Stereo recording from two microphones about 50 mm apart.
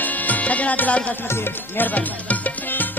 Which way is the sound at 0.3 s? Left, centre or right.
Left.